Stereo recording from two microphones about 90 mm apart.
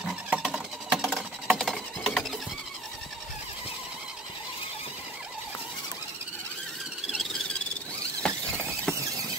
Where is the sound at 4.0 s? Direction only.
5° right (ahead or behind).